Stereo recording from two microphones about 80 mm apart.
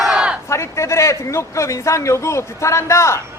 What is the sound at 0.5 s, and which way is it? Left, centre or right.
A man's voice, left.